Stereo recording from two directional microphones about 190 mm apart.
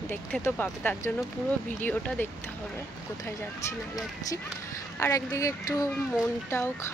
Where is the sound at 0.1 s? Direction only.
10° left (ahead or behind).